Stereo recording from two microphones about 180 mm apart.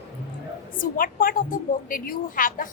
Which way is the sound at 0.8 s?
50° left (ahead or behind).